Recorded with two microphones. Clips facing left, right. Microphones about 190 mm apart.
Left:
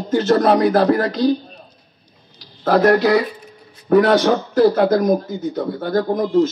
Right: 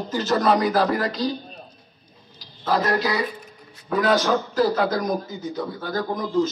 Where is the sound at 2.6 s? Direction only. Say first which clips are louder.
Left 8 dB; 65° left (ahead or behind).